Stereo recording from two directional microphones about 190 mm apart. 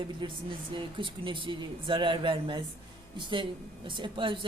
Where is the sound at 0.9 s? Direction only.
25° right (ahead or behind).